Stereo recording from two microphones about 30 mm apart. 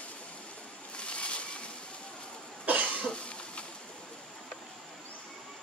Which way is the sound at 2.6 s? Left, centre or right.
Right.